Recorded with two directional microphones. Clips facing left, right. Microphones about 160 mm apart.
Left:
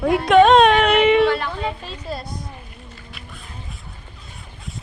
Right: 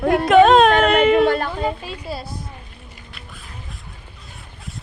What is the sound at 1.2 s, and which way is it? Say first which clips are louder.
Speech: right 1 dB; 45° right (ahead or behind).